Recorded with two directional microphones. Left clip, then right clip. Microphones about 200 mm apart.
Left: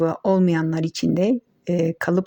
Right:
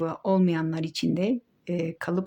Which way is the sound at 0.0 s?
25° left (ahead or behind).